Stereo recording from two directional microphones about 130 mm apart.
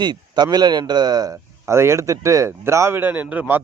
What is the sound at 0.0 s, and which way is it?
Speech, 35° right (ahead or behind).